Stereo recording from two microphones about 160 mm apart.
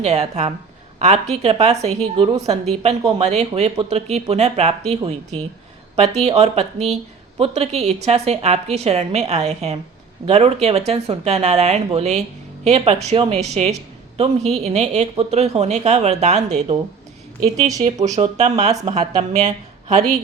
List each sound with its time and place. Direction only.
0.0 s speech: 45° right (ahead or behind)
17.6 s speech: 20° right (ahead or behind)
17.8 s speech: 45° right (ahead or behind)